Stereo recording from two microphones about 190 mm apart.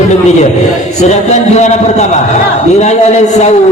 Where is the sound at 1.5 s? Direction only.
35° left (ahead or behind).